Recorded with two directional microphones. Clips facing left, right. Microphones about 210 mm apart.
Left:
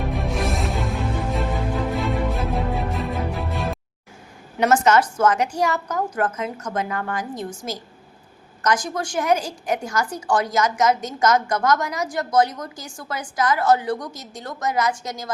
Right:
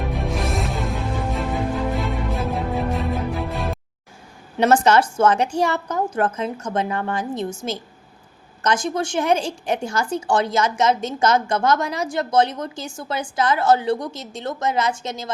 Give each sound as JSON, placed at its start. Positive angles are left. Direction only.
{"t": 0.1, "sound": "music", "side_deg": 0}
{"t": 4.6, "sound": "a woman's voice", "side_deg": -30}